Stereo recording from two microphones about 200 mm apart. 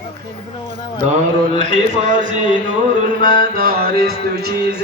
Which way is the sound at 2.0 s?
40° right (ahead or behind).